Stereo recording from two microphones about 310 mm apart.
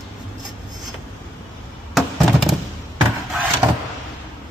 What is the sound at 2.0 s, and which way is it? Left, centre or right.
Music, centre.